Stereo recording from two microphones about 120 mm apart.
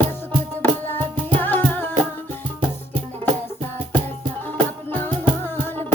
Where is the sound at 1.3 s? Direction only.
15° left (ahead or behind).